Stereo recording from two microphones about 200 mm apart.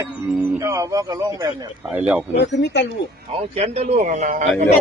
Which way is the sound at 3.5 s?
30° right (ahead or behind).